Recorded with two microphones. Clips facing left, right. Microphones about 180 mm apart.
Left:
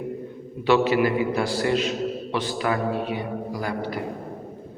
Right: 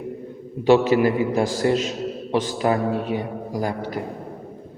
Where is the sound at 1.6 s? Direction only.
30° right (ahead or behind).